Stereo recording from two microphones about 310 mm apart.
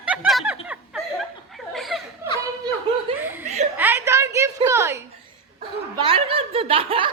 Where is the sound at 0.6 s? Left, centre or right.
Centre.